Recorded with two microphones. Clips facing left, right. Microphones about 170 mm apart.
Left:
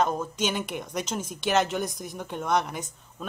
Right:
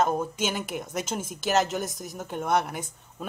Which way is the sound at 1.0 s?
50° right (ahead or behind).